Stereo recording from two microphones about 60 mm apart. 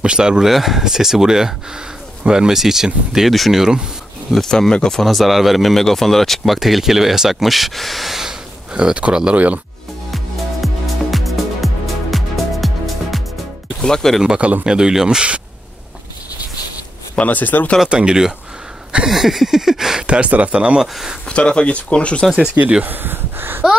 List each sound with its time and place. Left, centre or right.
0.0 s speech: centre
4.3 s speech: centre; by 9.6 s right
10.1 s music: centre
13.7 s speech: centre
14.2 s speech: centre
17.1 s speech: left
17.8 s speech: centre
21.3 s speech: centre
22.3 s speech: centre
22.8 s speech: right